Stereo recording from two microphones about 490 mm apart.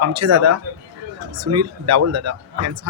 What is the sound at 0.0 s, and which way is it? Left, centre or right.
Speech, right.